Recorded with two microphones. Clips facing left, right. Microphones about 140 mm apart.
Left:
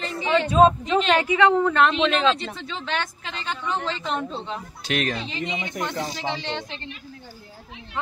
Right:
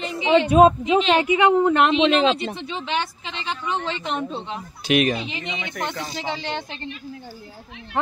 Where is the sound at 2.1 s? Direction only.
35° right (ahead or behind).